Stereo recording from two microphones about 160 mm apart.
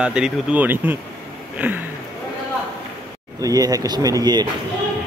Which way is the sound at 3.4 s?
20° right (ahead or behind).